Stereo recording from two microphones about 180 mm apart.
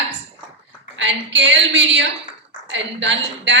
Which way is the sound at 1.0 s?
90° right.